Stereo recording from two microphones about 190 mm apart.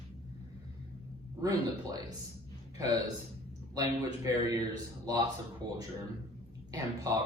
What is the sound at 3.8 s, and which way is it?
Speech, 15° right (ahead or behind).